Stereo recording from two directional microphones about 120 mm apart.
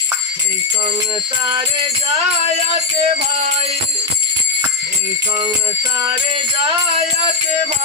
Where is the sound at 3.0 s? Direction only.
90° right.